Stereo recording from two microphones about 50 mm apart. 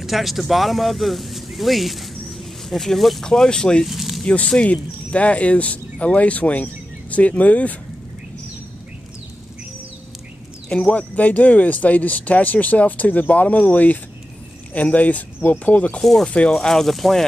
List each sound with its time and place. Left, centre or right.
0.0 s speech: centre
3.8 s a sound: centre
4.5 s speech: left
10.7 s speech: left
16.0 s speech: centre
16.3 s speech: left
16.5 s speech: centre